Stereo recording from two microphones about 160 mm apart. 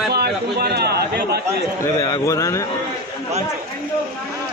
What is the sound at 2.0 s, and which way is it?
Speech, 20° left (ahead or behind).